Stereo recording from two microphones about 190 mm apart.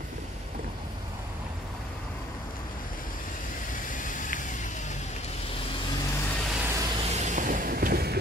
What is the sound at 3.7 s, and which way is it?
Vehicle, 45° left (ahead or behind).